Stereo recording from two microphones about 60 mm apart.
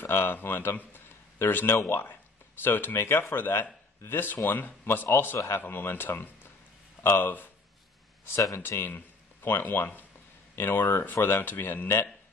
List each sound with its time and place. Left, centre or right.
0.0 s a man's voice: left
8.5 s a man's voice: left